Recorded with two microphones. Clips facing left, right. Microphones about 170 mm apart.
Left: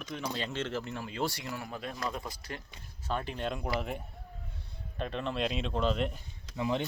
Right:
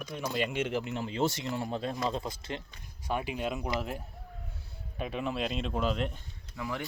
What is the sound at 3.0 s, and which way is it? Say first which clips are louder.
Speech: right 2 dB; 10° right (ahead or behind).